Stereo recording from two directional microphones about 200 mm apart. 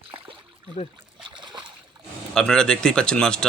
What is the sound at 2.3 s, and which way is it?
Speech, 5° left (ahead or behind).